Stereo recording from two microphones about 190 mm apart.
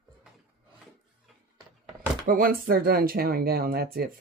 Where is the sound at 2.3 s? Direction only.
50° right (ahead or behind).